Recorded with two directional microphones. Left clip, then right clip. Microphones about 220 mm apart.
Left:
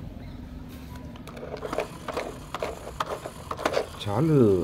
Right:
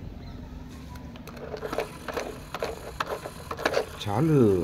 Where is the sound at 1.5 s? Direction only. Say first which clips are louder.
Even; 5° right (ahead or behind).